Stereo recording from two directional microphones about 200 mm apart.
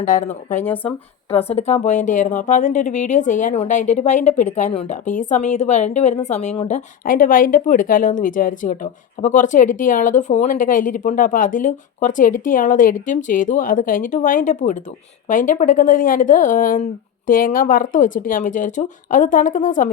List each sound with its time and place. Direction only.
0.0 s speech: 40° left (ahead or behind)
0.6 s speech: 10° left (ahead or behind)
1.3 s a woman's voice: 30° left (ahead or behind)